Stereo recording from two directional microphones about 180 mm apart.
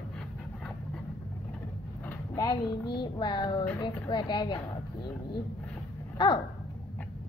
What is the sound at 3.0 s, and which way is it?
A woman's voice, 25° left (ahead or behind).